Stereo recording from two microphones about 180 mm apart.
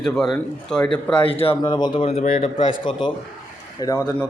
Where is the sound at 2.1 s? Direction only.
35° left (ahead or behind); by 4.2 s 15° left (ahead or behind).